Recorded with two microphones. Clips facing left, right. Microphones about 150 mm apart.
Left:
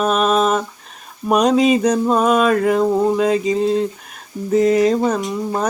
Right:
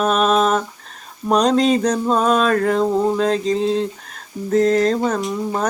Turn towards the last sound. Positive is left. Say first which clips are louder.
# left 1 dB
turn(degrees=5)  # may be behind; listen again after turning